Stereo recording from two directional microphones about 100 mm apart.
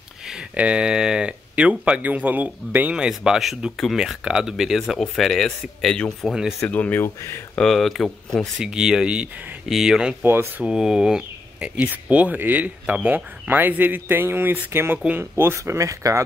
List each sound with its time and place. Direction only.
0.2 s speech: 5° right (ahead or behind)
6.7 s speech: 15° left (ahead or behind)
7.5 s speech: centre (ahead or behind)
8.5 s speech: 10° right (ahead or behind)
9.7 s speech: 5° right (ahead or behind)
10.2 s speech: 20° right (ahead or behind)
10.6 s speech: 5° right (ahead or behind); by 16.2 s 30° right (ahead or behind)